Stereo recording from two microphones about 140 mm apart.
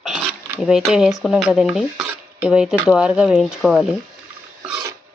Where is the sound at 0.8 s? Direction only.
5° right (ahead or behind).